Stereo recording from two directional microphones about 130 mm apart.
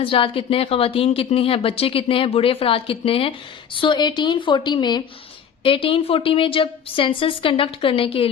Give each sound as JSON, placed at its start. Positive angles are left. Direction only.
{"t": 0.0, "sound": "a woman's voice", "side_deg": 45}